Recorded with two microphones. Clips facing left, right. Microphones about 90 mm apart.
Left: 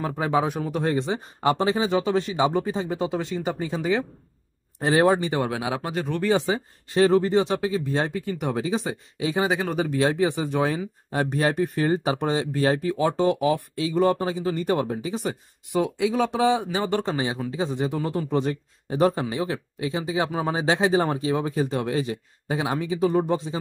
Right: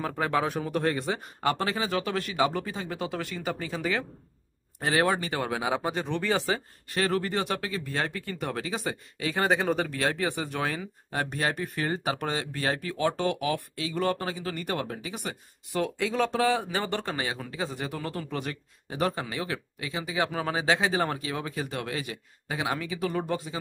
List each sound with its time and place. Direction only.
0.0 s speech: 10° left (ahead or behind)
0.9 s speech: 25° left (ahead or behind)
5.3 s speech: 15° left (ahead or behind)
5.8 s speech: centre (ahead or behind)
6.2 s speech: 20° left (ahead or behind)
9.4 s speech: centre (ahead or behind)
9.8 s speech: 20° left (ahead or behind)
15.8 s speech: 15° left (ahead or behind)